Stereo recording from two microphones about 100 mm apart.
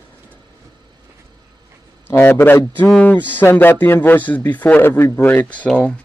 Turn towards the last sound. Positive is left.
turn(degrees=10)  # may be behind; listen again after turning